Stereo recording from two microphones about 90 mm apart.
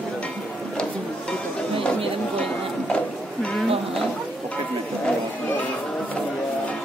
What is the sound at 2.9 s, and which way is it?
Music, 10° left (ahead or behind).